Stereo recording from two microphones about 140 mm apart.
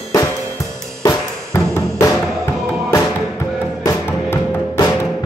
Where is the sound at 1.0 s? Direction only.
20° left (ahead or behind).